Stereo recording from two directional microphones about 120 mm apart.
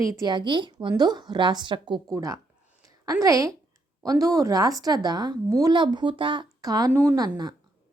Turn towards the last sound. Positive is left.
turn(degrees=-35)  # may be behind; listen again after turning